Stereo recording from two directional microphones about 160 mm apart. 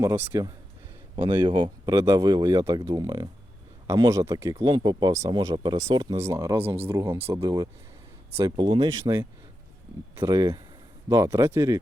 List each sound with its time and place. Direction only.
0.0 s speech: 15° right (ahead or behind)
1.1 s speech: 30° right (ahead or behind)